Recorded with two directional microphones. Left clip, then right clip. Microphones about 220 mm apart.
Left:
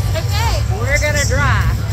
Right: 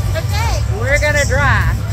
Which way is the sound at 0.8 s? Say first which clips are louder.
Right 3 dB; 20° right (ahead or behind).